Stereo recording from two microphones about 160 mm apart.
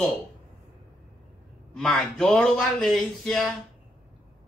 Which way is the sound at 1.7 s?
5° left (ahead or behind).